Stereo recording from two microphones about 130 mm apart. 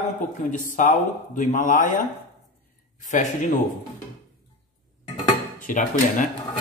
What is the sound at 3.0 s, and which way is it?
Speech, 75° left (ahead or behind).